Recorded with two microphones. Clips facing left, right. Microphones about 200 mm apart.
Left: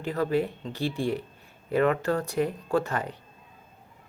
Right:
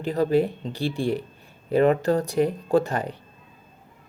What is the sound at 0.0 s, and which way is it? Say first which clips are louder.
Speech: right 5 dB; 35° right (ahead or behind).